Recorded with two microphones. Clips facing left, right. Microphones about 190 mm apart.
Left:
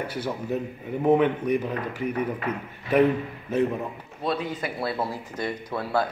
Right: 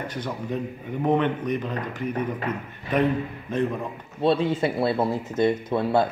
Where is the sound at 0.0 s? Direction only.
10° left (ahead or behind).